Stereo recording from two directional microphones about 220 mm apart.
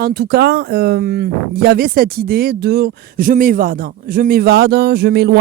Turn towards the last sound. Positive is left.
turn(degrees=-45)  # may be behind; listen again after turning